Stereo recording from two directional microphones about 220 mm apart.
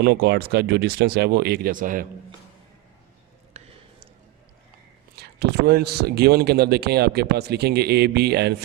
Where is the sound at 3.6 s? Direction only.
30° right (ahead or behind).